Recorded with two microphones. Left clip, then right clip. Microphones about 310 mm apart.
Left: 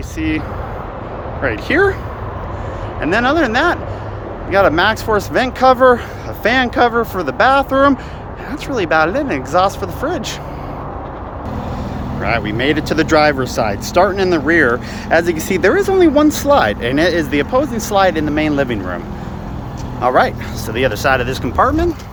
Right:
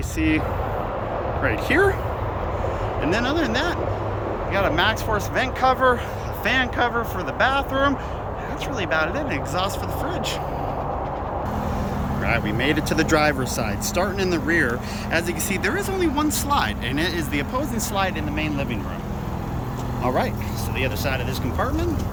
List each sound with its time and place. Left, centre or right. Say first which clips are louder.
0.2 s speech: left 2 dB; centre
3.0 s speech: left 10 dB; centre
12.2 s speech: left 7 dB; centre
20.1 s speech: left 11 dB; centre